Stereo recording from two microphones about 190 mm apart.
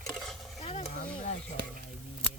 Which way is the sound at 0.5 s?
35° left (ahead or behind).